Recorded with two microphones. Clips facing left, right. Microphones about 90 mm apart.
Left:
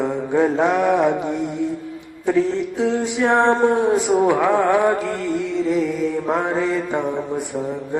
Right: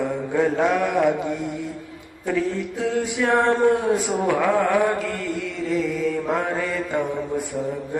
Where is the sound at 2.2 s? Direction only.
20° left (ahead or behind).